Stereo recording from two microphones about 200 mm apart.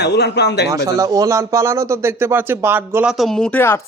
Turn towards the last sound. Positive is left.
turn(degrees=10)  # may be behind; listen again after turning